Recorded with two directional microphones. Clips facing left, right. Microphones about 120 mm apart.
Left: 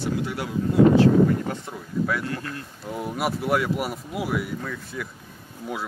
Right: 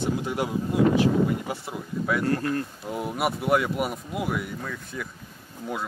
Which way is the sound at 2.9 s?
Centre (ahead or behind).